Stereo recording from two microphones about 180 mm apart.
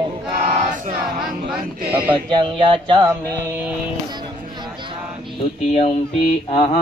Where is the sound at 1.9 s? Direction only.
30° right (ahead or behind).